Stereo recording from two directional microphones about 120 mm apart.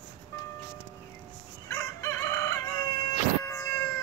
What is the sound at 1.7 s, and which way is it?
Crowing, 20° left (ahead or behind).